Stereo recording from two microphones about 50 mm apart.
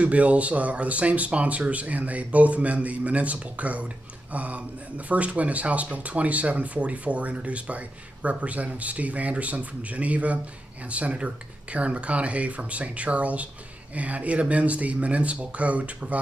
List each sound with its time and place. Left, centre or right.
0.0 s speech: right